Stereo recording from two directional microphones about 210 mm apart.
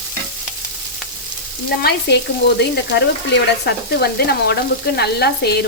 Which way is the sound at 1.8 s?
55° left (ahead or behind).